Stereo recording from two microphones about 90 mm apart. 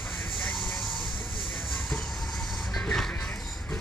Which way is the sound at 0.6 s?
Centre (ahead or behind).